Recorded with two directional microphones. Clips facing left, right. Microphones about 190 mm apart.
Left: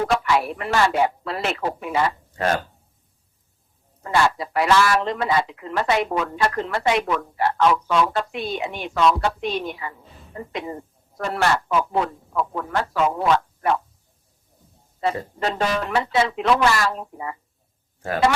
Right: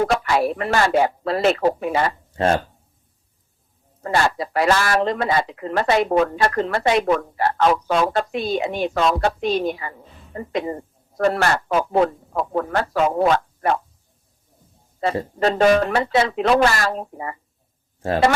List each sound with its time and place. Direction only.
0.3 s speech: 40° right (ahead or behind)
2.3 s speech: 30° right (ahead or behind)
4.0 s a man's voice: 40° right (ahead or behind)
15.4 s speech: 40° right (ahead or behind)